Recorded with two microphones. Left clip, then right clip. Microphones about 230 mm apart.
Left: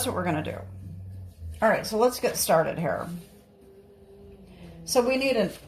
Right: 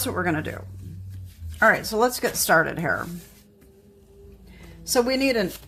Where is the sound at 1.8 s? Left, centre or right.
Right.